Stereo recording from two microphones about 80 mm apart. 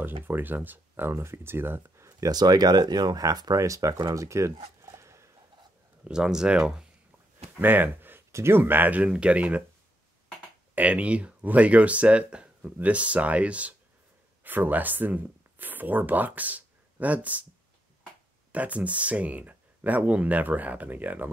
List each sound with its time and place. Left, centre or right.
0.0 s speech: right
6.0 s speech: centre
7.6 s speech: right
10.7 s speech: centre
18.5 s speech: centre